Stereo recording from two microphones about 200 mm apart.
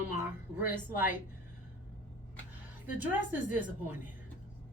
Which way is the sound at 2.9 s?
10° right (ahead or behind).